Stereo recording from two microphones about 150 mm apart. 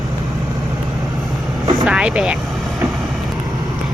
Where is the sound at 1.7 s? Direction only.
5° right (ahead or behind).